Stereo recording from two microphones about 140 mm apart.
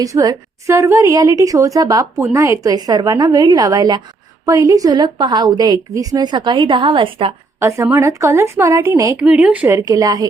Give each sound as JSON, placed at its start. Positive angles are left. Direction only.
{"t": 0.0, "sound": "a woman's voice", "side_deg": -25}
{"t": 7.9, "sound": "a woman's voice", "side_deg": -20}
{"t": 9.1, "sound": "speech", "side_deg": -10}
{"t": 9.7, "sound": "a woman's voice", "side_deg": -25}